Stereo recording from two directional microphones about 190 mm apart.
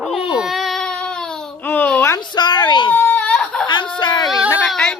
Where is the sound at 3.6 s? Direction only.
25° left (ahead or behind).